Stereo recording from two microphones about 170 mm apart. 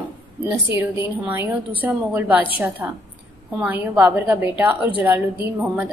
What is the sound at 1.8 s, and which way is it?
A woman's voice, 10° right (ahead or behind).